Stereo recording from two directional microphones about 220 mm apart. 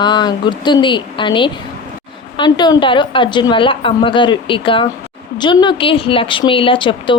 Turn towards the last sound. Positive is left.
turn(degrees=20)  # may be behind; listen again after turning